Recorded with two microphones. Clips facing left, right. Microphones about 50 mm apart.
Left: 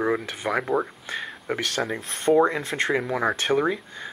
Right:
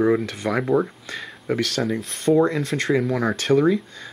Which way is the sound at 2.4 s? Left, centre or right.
Centre.